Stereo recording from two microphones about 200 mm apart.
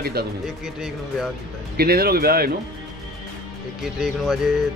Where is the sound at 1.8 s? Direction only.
50° right (ahead or behind).